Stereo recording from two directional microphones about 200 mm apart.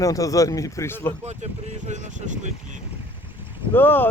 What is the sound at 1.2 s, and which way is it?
Speech, 35° right (ahead or behind).